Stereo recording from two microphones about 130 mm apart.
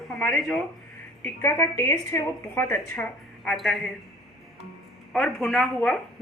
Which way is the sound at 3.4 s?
Centre (ahead or behind).